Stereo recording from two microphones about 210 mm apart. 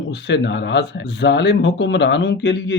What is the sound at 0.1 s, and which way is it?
Speech, 55° left (ahead or behind).